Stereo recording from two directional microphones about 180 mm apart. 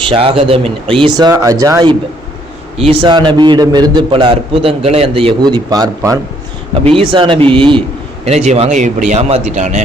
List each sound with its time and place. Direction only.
0.0 s a man's voice: 30° right (ahead or behind)
2.7 s a man's voice: 30° right (ahead or behind)
6.8 s a man's voice: 30° right (ahead or behind)